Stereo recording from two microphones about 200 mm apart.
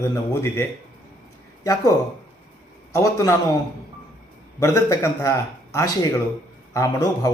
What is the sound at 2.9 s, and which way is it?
Speech, 15° left (ahead or behind).